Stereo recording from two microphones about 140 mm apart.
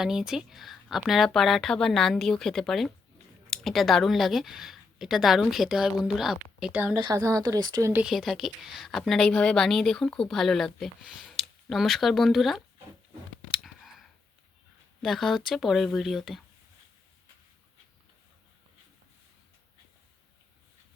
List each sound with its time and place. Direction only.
0.0 s a woman's voice: 5° right (ahead or behind)
7.0 s speech: 25° right (ahead or behind)
8.0 s a woman's voice: centre (ahead or behind)
13.5 s a sound: centre (ahead or behind)
15.0 s a woman's voice: centre (ahead or behind)